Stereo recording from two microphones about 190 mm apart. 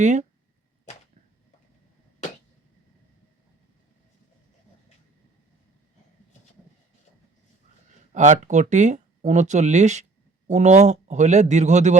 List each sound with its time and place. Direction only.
0.0 s speech: 40° right (ahead or behind)
8.1 s speech: 40° right (ahead or behind)